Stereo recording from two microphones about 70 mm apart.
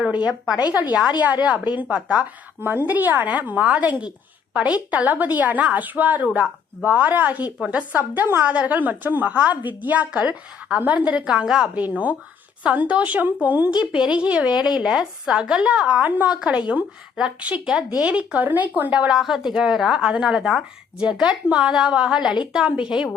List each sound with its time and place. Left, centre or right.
1.2 s a woman's voice: right
2.6 s a woman's voice: right; by 11.8 s centre
11.8 s speech: right
13.9 s a woman's voice: centre
16.3 s a woman's voice: centre
19.1 s a woman's voice: centre